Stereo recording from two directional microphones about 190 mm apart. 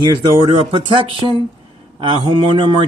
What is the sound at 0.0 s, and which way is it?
Speech, 25° right (ahead or behind).